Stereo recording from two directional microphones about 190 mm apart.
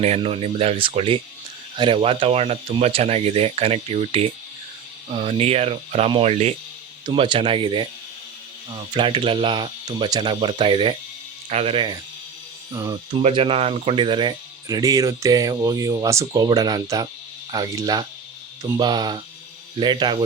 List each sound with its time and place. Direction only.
0.0 s speech: 30° right (ahead or behind)
12.7 s speech: 15° right (ahead or behind)
13.1 s speech: 30° right (ahead or behind)